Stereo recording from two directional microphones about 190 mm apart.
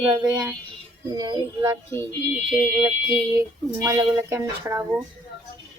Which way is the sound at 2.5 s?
5° right (ahead or behind).